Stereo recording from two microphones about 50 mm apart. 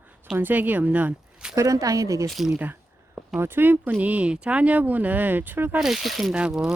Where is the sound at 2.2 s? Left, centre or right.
Centre.